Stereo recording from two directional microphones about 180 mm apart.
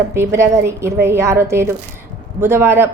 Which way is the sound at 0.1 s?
15° right (ahead or behind).